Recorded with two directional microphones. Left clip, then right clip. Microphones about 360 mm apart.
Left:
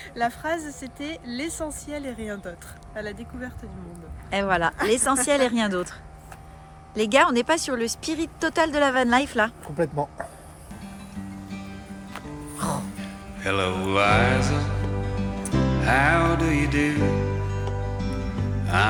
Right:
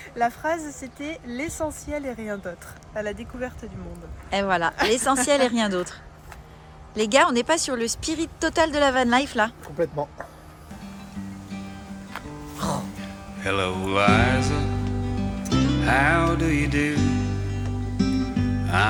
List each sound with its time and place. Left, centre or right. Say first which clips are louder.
0.0 s speech: right 2 dB; centre
9.7 s speech: even; left
10.8 s music: right 1 dB; centre